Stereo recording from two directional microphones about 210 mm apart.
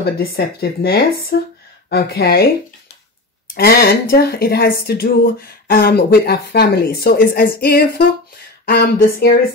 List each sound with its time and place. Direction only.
0.0 s speech: 45° left (ahead or behind)
3.5 s speech: 45° left (ahead or behind)